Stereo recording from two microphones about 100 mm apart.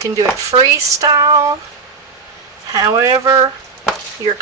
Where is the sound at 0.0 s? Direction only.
35° right (ahead or behind).